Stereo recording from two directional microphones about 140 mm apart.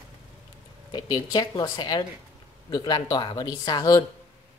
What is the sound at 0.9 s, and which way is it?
Speech, 30° left (ahead or behind).